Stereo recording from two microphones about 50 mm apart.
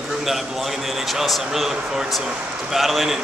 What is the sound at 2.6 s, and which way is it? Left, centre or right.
Speech, centre.